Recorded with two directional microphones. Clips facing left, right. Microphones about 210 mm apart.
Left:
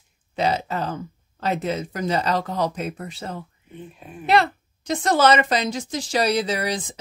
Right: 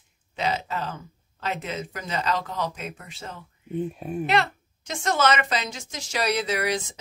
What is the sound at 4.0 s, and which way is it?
Speech, 45° right (ahead or behind).